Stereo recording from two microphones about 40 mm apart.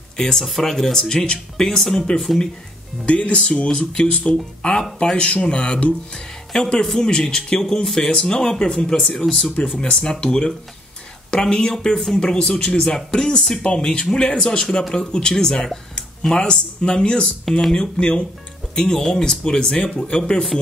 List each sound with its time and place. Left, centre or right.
0.2 s speech: centre
3.1 s speech: left
6.5 s speech: centre
11.4 s speech: centre; by 17.3 s left
17.5 s speech: centre
17.7 s speech: left